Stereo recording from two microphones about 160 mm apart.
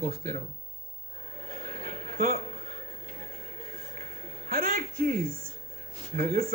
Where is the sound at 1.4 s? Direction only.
60° right (ahead or behind).